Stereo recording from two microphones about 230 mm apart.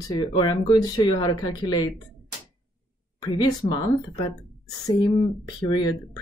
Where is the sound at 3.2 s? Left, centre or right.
Centre.